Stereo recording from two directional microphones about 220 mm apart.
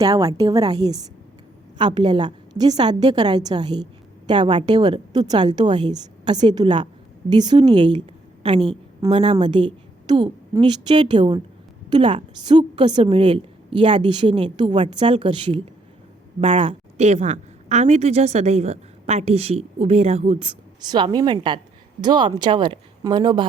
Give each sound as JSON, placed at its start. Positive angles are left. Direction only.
{"t": 0.0, "sound": "a woman's voice", "side_deg": -15}
{"t": 9.0, "sound": "a woman's voice", "side_deg": -25}